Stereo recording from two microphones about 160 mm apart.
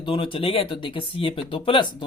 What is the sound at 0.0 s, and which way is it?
Speech, 30° left (ahead or behind).